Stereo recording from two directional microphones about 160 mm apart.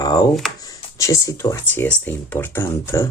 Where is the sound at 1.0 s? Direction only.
20° left (ahead or behind).